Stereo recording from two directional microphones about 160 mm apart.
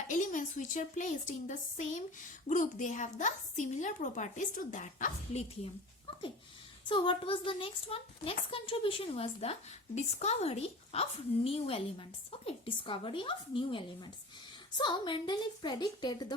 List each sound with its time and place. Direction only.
0.1 s a woman's voice: 55° left (ahead or behind)
6.8 s a woman's voice: 30° left (ahead or behind)